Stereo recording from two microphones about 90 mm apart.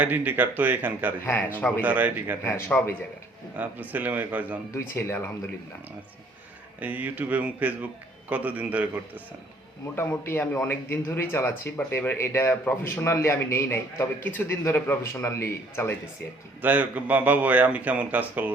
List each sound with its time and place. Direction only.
0.0 s speech: 20° right (ahead or behind)
1.2 s a man's voice: 25° left (ahead or behind)
1.8 s speech: 20° right (ahead or behind)
2.4 s a man's voice: 30° left (ahead or behind)
3.5 s speech: 20° right (ahead or behind)
4.7 s speech: 30° left (ahead or behind)
6.7 s speech: 20° right (ahead or behind)
9.9 s a man's voice: 25° left (ahead or behind)
14.3 s a man's voice: 20° left (ahead or behind)
16.6 s speech: 20° right (ahead or behind)